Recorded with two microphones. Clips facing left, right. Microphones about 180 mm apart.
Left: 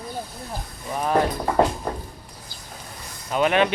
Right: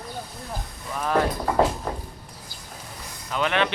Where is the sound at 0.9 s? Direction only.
20° left (ahead or behind).